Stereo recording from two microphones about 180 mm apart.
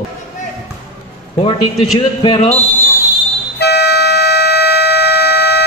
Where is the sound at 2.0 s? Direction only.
25° left (ahead or behind).